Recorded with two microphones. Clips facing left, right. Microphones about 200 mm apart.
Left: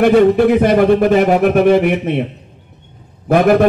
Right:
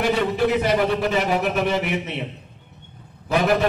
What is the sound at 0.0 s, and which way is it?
A man's voice, 55° left (ahead or behind).